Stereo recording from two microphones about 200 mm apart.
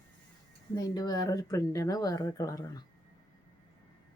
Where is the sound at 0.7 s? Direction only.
20° left (ahead or behind).